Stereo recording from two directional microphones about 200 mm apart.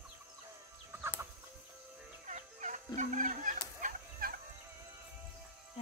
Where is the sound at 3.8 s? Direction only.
40° right (ahead or behind).